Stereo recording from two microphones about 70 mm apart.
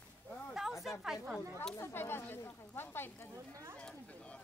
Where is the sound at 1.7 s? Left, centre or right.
Left.